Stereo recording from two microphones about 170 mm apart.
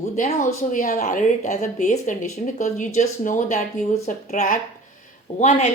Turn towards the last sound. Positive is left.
turn(degrees=45)  # may be behind; listen again after turning